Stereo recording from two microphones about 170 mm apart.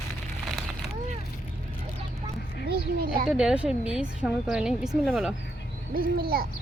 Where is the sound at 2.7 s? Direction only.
60° right (ahead or behind).